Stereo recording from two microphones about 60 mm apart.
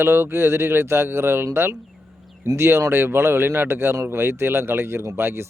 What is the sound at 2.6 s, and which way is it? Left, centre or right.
Speech, right.